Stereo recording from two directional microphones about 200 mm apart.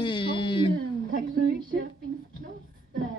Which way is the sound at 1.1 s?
50° right (ahead or behind).